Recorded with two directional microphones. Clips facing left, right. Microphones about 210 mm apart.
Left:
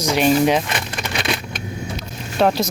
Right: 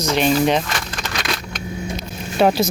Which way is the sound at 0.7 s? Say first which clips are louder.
Left 2 dB; 25° left (ahead or behind).